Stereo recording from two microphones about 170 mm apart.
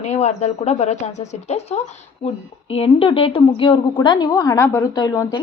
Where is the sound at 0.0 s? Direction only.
40° left (ahead or behind).